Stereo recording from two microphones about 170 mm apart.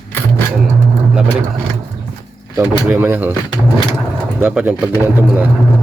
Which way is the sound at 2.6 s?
10° right (ahead or behind).